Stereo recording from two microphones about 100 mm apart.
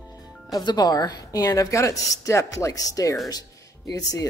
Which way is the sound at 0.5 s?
40° left (ahead or behind).